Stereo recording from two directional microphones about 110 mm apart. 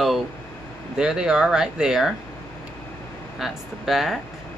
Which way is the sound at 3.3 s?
Centre (ahead or behind).